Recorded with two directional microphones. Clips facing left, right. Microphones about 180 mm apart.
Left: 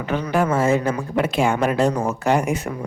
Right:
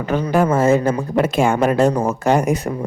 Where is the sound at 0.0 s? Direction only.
40° right (ahead or behind).